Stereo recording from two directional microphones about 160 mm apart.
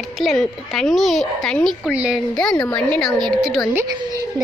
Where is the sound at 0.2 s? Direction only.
Centre (ahead or behind).